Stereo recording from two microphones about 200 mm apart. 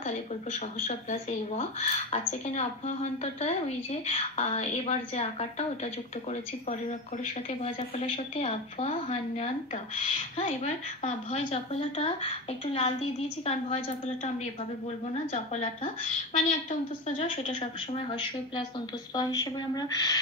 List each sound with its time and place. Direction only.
0.0 s speech: 35° left (ahead or behind)
8.4 s a woman's voice: 30° left (ahead or behind)
15.3 s speech: 35° left (ahead or behind)
17.2 s a woman's voice: 30° left (ahead or behind)
19.1 s a woman's voice: 20° left (ahead or behind)